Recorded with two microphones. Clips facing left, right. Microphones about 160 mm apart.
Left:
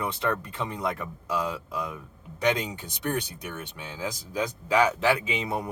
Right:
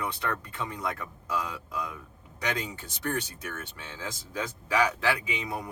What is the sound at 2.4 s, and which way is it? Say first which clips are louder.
A man's voice: left 6 dB; 20° left (ahead or behind).